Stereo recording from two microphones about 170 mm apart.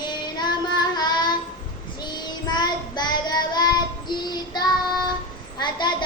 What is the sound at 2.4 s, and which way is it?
Child singing, 25° left (ahead or behind).